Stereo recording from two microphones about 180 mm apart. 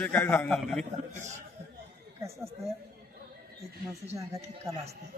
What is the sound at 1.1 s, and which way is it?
Speech, 40° right (ahead or behind).